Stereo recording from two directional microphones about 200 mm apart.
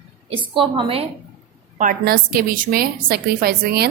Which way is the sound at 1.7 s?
40° right (ahead or behind).